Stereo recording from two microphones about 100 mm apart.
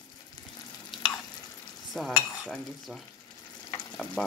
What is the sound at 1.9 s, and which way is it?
Stir, 5° left (ahead or behind).